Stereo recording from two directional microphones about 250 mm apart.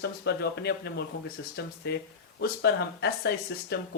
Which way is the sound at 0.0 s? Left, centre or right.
Left.